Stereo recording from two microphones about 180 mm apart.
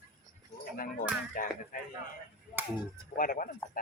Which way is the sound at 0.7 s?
50° left (ahead or behind).